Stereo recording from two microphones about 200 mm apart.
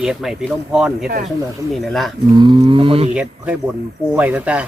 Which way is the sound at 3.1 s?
5° right (ahead or behind).